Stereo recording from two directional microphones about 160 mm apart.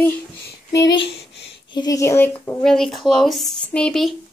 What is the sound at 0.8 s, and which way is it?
Speech, 30° left (ahead or behind).